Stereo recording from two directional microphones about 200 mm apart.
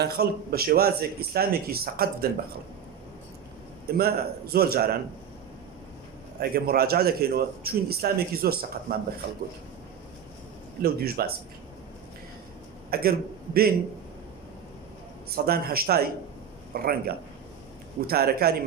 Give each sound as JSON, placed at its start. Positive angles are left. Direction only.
{"t": 0.0, "sound": "a man's voice", "side_deg": -50}
{"t": 3.9, "sound": "a man's voice", "side_deg": -50}
{"t": 6.4, "sound": "a man's voice", "side_deg": -50}
{"t": 10.8, "sound": "a man's voice", "side_deg": -50}
{"t": 12.9, "sound": "a man's voice", "side_deg": -50}
{"t": 15.4, "sound": "a man's voice", "side_deg": -50}